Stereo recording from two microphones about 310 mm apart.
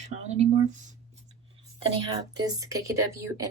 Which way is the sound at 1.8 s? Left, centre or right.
Centre.